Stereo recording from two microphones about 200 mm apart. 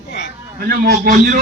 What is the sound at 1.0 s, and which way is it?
Speech, 50° right (ahead or behind).